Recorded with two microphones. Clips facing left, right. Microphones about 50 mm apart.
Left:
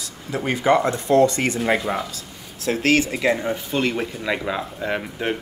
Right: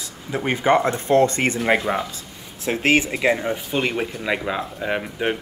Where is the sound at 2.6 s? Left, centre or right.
Right.